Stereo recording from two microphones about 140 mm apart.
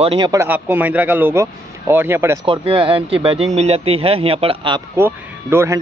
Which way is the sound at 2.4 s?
40° right (ahead or behind).